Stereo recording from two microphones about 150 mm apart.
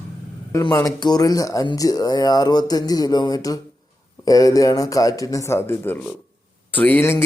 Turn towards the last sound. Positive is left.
turn(degrees=15)  # may be behind; listen again after turning